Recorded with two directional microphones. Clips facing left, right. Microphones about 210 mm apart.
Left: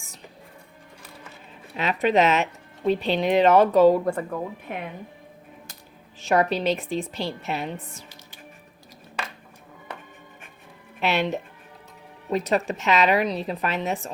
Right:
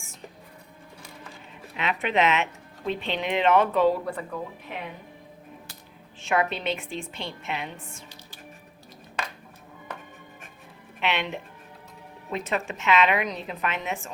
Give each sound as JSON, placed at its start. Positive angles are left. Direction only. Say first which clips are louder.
{"t": 1.7, "sound": "speech", "louder": "left 5 dB", "side_deg": 40}
{"t": 6.1, "sound": "speech", "louder": "left 4 dB", "side_deg": 40}
{"t": 11.0, "sound": "speech", "louder": "left 5 dB", "side_deg": 40}